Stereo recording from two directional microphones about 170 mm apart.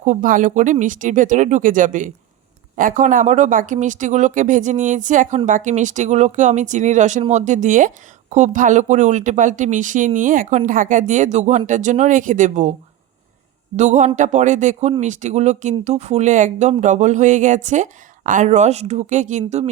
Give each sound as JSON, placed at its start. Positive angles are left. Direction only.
{"t": 0.0, "sound": "speech", "side_deg": -50}
{"t": 13.7, "sound": "speech", "side_deg": -45}